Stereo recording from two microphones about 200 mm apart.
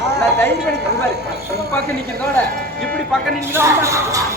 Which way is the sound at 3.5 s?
15° right (ahead or behind).